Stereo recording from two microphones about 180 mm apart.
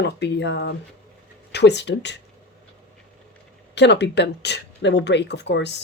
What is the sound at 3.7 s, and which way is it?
Speech, 75° left (ahead or behind).